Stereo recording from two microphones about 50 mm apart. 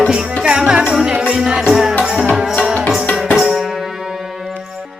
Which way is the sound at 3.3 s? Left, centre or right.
Centre.